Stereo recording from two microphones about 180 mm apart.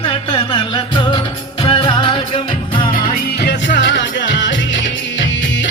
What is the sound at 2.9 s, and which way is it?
Music, 50° left (ahead or behind).